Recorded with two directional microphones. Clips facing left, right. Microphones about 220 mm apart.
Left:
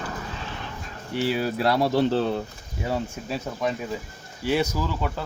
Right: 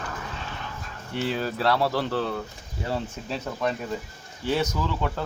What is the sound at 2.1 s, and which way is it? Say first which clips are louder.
Speech: left 4 dB; 25° left (ahead or behind).